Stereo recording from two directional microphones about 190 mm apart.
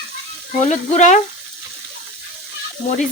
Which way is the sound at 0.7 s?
40° left (ahead or behind).